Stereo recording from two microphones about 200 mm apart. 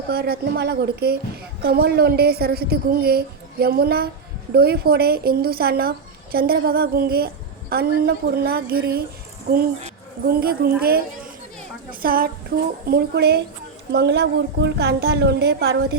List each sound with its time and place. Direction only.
0.1 s a woman's voice: 50° right (ahead or behind)
12.0 s a woman's voice: 45° right (ahead or behind)